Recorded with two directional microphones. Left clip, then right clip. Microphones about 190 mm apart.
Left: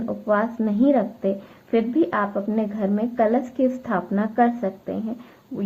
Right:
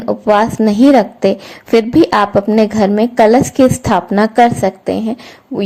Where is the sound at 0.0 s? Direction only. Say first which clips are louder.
Right 11 dB; 35° right (ahead or behind).